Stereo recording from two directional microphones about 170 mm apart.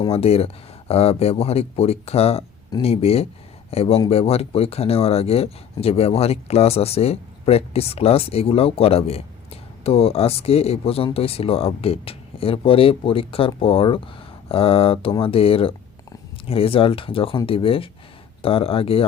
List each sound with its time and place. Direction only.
0.1 s speech: 35° left (ahead or behind)